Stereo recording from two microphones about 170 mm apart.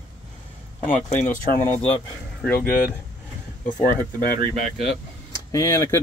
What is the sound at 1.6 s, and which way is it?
Speech, 10° left (ahead or behind).